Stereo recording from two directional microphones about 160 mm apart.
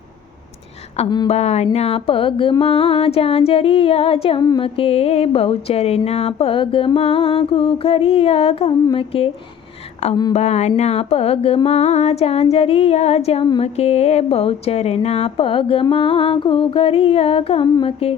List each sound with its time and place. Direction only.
1.3 s speech: 40° left (ahead or behind)